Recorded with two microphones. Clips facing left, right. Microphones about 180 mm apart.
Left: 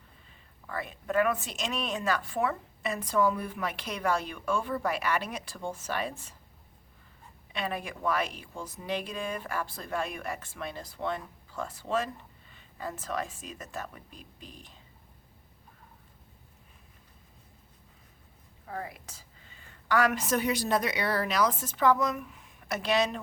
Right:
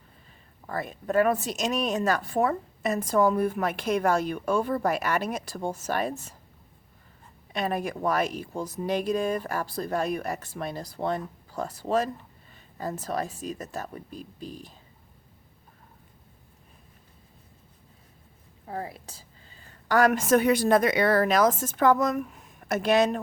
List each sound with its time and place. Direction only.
0.7 s speech: 40° right (ahead or behind)
7.5 s speech: 45° right (ahead or behind)
18.6 s a woman's voice: 35° right (ahead or behind); by 23.2 s 50° right (ahead or behind)